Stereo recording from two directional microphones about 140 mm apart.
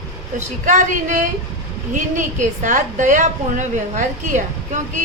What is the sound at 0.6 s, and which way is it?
A woman's voice, 65° right (ahead or behind).